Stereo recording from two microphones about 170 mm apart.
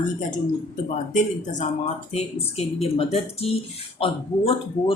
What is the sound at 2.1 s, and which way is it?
Speech, 35° left (ahead or behind).